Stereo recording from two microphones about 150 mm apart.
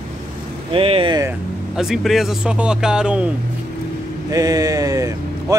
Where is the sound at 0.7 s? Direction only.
40° right (ahead or behind).